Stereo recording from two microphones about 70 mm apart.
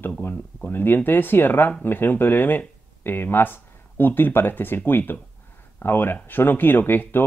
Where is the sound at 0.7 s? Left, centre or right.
Left.